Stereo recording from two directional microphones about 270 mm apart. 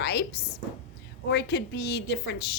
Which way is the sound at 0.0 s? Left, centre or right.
Left.